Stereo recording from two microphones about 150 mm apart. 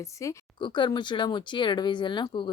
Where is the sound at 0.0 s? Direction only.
20° left (ahead or behind).